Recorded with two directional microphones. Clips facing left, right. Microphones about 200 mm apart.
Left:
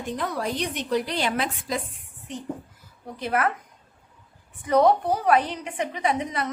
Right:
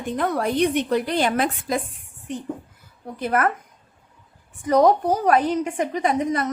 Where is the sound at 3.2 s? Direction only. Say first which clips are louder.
Right 3 dB; 50° right (ahead or behind).